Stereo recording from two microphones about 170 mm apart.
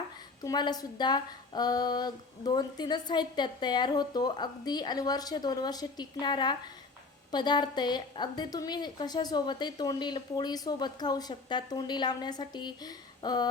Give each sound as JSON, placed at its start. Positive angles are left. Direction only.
{"t": 0.4, "sound": "a woman's voice", "side_deg": 25}